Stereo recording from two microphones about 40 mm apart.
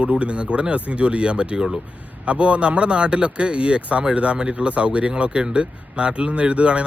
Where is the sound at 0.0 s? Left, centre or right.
Right.